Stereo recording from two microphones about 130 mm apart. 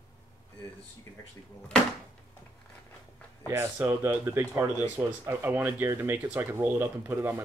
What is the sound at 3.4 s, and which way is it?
Speech, 15° right (ahead or behind).